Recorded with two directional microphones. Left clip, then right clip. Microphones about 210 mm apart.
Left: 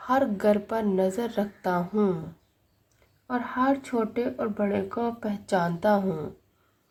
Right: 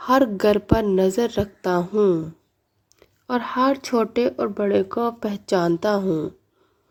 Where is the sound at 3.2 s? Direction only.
45° right (ahead or behind).